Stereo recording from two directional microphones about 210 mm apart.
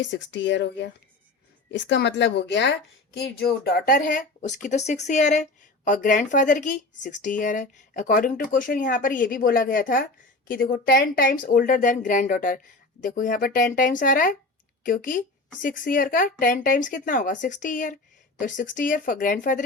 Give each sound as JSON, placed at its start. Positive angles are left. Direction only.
{"t": 0.0, "sound": "speech", "side_deg": 60}